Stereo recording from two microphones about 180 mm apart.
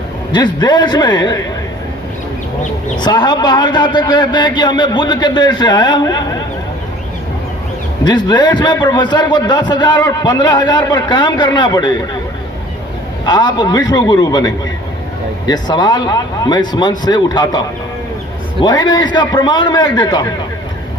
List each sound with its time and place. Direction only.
0.3 s a man's voice: 25° left (ahead or behind)
3.0 s a man's voice: 25° left (ahead or behind)
8.0 s a man's voice: 25° left (ahead or behind)
13.2 s a man's voice: 25° left (ahead or behind)